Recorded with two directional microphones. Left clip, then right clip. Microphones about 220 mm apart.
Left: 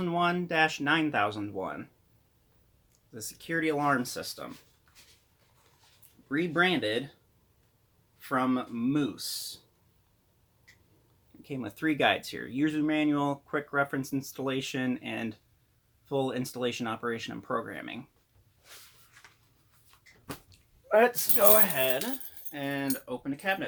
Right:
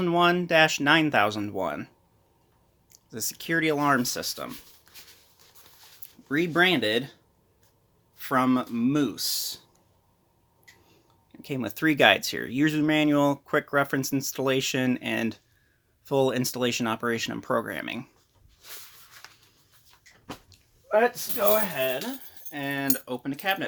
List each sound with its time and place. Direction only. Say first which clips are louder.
0.0 s speech: right 6 dB; 40° right (ahead or behind)
3.1 s speech: right 6 dB; 45° right (ahead or behind)
6.2 s speech: right 4 dB; 45° right (ahead or behind)
8.2 s speech: right 5 dB; 45° right (ahead or behind)
11.3 s speech: right 6 dB; 40° right (ahead or behind)
19.2 s a sound: right 6 dB; 40° right (ahead or behind)
20.8 s speech: right 1 dB; 10° left (ahead or behind)
22.4 s speech: right 3 dB; 30° right (ahead or behind); by 23.6 s 45° right (ahead or behind)